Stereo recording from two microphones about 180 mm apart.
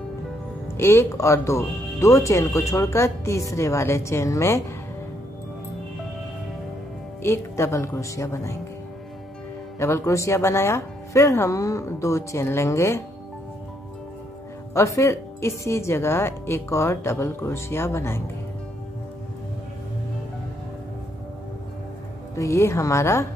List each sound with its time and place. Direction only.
0.7 s speech: 15° left (ahead or behind)
7.2 s speech: 15° left (ahead or behind)
9.8 s speech: 15° left (ahead or behind)
14.7 s speech: 15° left (ahead or behind)
22.3 s speech: 15° left (ahead or behind)